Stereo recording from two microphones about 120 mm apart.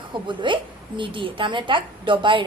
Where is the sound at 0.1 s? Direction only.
40° right (ahead or behind).